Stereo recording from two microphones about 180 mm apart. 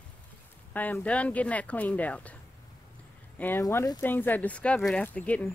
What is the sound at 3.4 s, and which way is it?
Speech, 15° left (ahead or behind).